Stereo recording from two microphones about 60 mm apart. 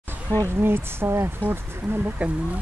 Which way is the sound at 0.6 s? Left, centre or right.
Right.